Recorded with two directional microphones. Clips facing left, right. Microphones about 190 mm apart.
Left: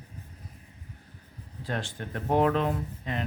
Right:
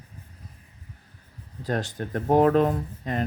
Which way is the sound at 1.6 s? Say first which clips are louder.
Right 6 dB; 40° right (ahead or behind).